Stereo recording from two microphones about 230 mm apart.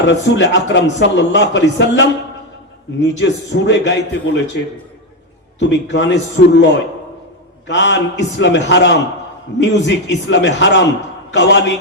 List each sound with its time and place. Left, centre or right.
0.0 s a man's voice: left
3.2 s a man's voice: left
5.5 s a man's voice: left
7.7 s a man's voice: left